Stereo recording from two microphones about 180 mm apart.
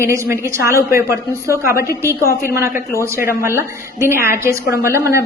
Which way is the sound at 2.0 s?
15° left (ahead or behind).